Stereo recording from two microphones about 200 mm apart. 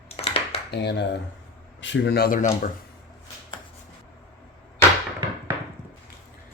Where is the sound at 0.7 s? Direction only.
55° left (ahead or behind).